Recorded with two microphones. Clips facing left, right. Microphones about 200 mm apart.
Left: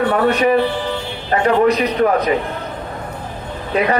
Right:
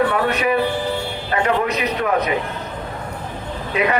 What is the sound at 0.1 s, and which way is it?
Speech, 35° left (ahead or behind).